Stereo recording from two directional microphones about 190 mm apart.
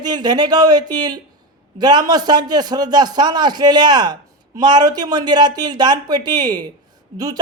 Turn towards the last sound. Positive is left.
turn(degrees=-20)  # may be behind; listen again after turning